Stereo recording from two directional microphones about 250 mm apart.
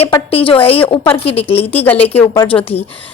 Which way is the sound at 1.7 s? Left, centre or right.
Centre.